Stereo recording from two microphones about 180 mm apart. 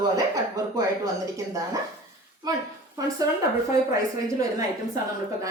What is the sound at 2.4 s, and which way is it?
Speech, 20° right (ahead or behind).